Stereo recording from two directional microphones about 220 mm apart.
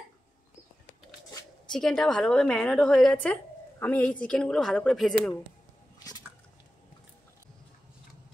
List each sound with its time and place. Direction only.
1.7 s a woman's voice: centre (ahead or behind)